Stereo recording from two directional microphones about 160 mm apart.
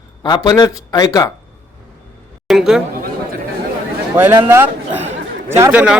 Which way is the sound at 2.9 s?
65° right (ahead or behind).